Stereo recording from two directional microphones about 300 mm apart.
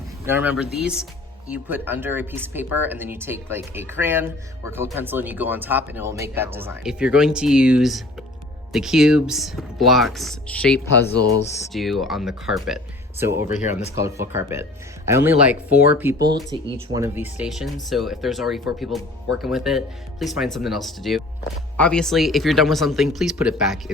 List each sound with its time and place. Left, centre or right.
0.3 s speech: centre
13.5 s speech: left
13.9 s speech: centre